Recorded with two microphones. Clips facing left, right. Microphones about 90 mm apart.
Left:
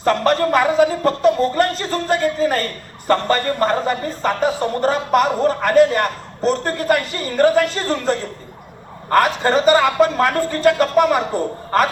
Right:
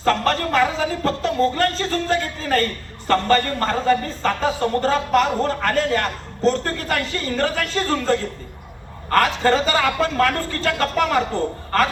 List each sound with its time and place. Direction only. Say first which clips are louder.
0.0 s speech: left 3 dB; 20° left (ahead or behind)